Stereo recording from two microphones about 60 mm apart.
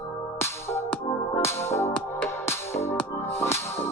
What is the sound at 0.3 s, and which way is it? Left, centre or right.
Music, left.